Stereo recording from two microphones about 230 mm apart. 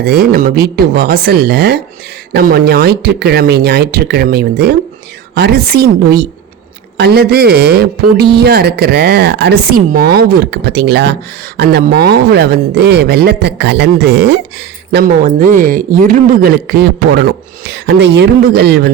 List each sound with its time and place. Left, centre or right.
0.0 s a woman's voice: right
14.9 s a woman's voice: right